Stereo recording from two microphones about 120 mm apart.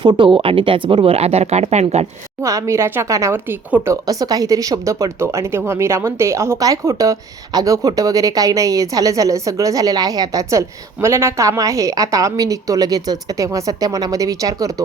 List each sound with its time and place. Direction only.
0.0 s speech: 40° right (ahead or behind); by 2.0 s 65° right (ahead or behind)
2.4 s speech: 25° right (ahead or behind)
4.0 s speech: 30° right (ahead or behind)